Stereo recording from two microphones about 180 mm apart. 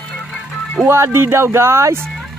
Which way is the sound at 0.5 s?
Centre (ahead or behind).